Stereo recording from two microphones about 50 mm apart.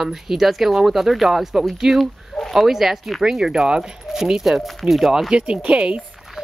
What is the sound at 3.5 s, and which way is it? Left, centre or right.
Speech, centre.